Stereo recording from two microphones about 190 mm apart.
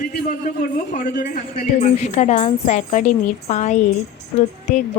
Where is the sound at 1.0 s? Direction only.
55° left (ahead or behind).